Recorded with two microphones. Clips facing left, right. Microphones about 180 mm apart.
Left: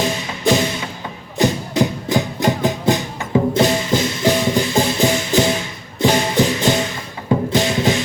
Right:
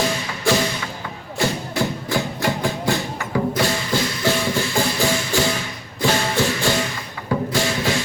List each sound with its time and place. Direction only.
0.5 s music: 20° left (ahead or behind)